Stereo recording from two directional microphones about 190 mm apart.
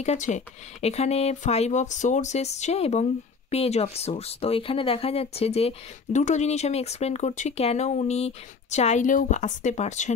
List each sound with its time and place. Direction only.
0.0 s speech: 35° left (ahead or behind)